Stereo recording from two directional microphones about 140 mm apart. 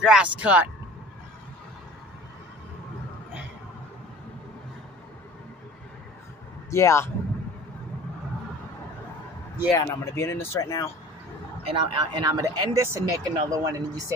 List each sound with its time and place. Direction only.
0.0 s speech: 5° right (ahead or behind)
6.7 s speech: 20° left (ahead or behind)
9.7 s speech: 20° left (ahead or behind)
11.6 s speech: 40° right (ahead or behind)